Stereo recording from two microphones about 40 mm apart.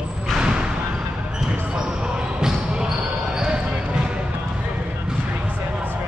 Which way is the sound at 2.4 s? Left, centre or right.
Centre.